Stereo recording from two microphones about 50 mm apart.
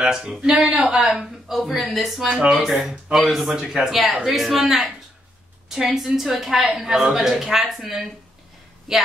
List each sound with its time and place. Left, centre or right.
0.0 s speech: centre
2.2 s speech: centre